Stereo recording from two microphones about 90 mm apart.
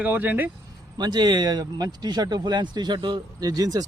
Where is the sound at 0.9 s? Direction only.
50° right (ahead or behind).